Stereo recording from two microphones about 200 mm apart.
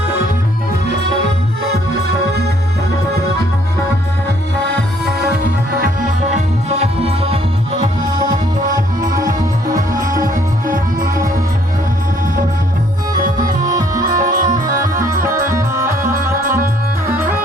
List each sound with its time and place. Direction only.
6.3 s music: 35° right (ahead or behind)
8.7 s music: 15° right (ahead or behind)
10.2 s music: 45° right (ahead or behind)
13.7 s music: 20° right (ahead or behind)
14.0 s music: 45° right (ahead or behind)
14.8 s music: 15° right (ahead or behind)